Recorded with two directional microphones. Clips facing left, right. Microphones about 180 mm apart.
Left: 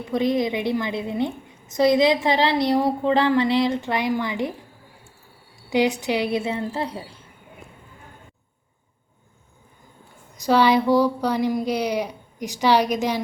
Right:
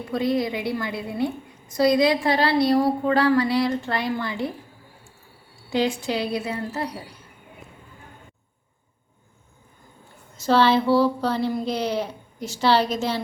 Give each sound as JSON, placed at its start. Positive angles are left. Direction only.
{"t": 0.1, "sound": "a woman's voice", "side_deg": 20}
{"t": 5.7, "sound": "a woman's voice", "side_deg": 20}
{"t": 10.4, "sound": "speech", "side_deg": 15}